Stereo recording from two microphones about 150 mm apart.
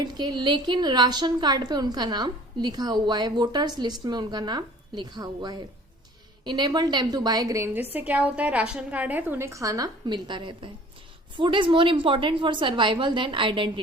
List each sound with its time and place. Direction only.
0.0 s a woman's voice: 30° right (ahead or behind)